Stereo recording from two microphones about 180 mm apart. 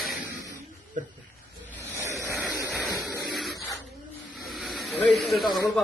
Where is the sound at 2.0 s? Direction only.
15° right (ahead or behind); by 3.6 s centre (ahead or behind).